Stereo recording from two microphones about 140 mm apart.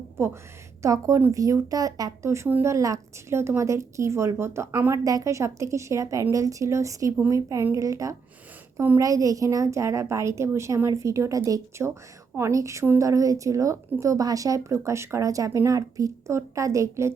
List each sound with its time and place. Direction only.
0.8 s speech: 25° right (ahead or behind)